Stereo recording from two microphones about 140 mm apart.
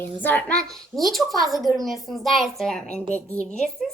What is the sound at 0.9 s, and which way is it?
Speech, centre (ahead or behind).